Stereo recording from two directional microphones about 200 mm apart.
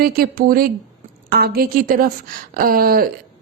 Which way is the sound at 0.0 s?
45° right (ahead or behind).